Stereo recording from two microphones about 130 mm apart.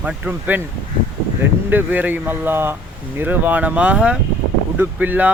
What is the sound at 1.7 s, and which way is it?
Speech, 15° right (ahead or behind).